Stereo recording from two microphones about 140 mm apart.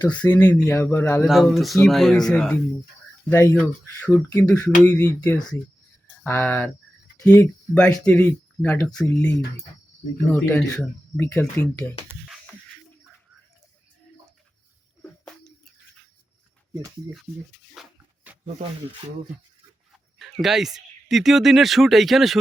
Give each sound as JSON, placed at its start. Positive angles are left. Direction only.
{"t": 0.0, "sound": "speech", "side_deg": 10}
{"t": 1.3, "sound": "speech", "side_deg": 0}
{"t": 10.3, "sound": "speech", "side_deg": 5}
{"t": 17.8, "sound": "a sound", "side_deg": 0}
{"t": 20.4, "sound": "speech", "side_deg": 0}